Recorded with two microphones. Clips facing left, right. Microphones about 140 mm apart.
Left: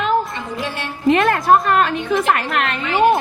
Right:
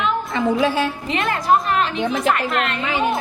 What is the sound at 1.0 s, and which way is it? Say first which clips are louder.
Speech: left 10 dB; 55° left (ahead or behind).